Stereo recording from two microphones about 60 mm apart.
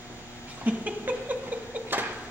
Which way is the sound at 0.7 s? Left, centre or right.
Right.